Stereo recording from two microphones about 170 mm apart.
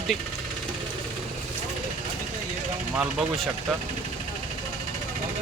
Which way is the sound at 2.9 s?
5° right (ahead or behind).